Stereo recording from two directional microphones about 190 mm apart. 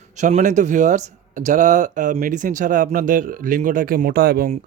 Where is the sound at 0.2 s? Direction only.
40° right (ahead or behind).